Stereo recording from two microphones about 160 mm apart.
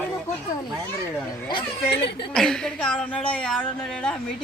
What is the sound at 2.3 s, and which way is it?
A woman's voice, 5° left (ahead or behind).